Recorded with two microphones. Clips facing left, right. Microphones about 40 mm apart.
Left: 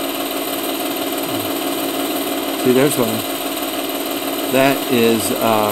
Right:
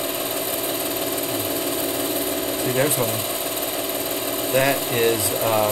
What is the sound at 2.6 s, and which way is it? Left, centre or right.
Speech, left.